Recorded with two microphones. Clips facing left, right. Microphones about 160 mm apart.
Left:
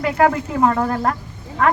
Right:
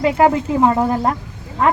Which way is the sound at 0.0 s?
25° right (ahead or behind).